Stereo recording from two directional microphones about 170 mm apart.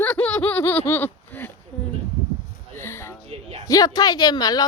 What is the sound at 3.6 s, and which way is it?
A woman's voice, 20° left (ahead or behind).